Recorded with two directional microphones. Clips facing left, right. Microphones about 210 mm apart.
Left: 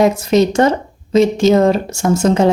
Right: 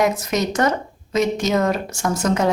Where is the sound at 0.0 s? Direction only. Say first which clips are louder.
Left 8 dB; 30° left (ahead or behind).